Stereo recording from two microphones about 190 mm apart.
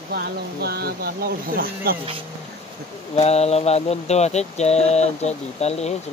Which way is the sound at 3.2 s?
35° left (ahead or behind).